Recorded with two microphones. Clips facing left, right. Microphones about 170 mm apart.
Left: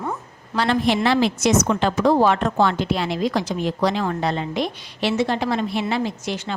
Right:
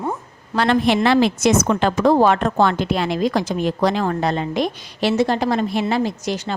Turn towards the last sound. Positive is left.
turn(degrees=-40)  # may be behind; listen again after turning